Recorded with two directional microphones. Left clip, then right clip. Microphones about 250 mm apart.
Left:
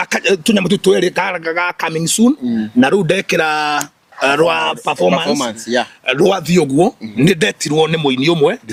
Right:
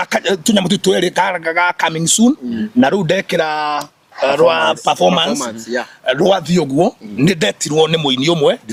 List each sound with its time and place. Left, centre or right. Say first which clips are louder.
0.0 s speech: left 1 dB; left
4.6 s speech: right 2 dB; centre
6.1 s speech: right 2 dB; left